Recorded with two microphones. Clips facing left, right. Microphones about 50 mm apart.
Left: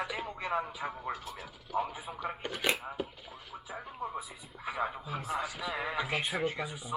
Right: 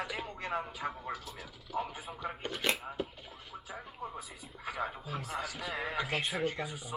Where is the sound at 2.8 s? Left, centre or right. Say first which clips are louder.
Left 1 dB; centre.